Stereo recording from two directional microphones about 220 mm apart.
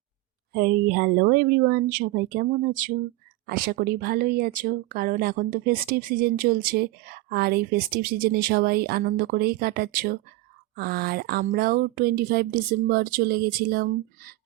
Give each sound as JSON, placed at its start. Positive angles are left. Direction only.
{"t": 0.5, "sound": "speech", "side_deg": -45}